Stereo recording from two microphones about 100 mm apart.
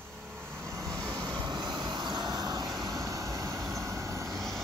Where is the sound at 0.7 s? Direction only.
35° right (ahead or behind).